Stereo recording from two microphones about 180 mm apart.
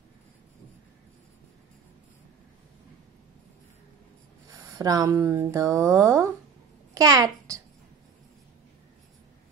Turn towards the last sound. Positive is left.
turn(degrees=-20)  # may be behind; listen again after turning